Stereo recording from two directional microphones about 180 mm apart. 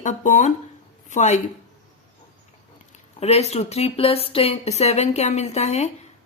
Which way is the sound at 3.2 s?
35° left (ahead or behind).